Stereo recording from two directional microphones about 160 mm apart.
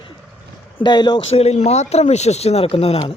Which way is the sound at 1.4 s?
40° left (ahead or behind).